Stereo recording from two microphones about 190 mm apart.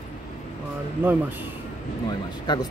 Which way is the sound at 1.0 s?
10° right (ahead or behind).